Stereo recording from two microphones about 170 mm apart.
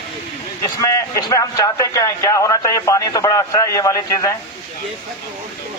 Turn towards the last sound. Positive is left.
turn(degrees=20)  # may be behind; listen again after turning